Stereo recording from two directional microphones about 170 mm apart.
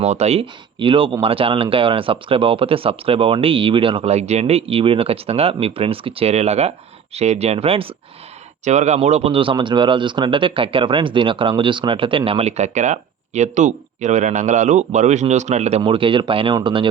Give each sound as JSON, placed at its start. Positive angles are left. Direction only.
{"t": 0.0, "sound": "speech", "side_deg": -40}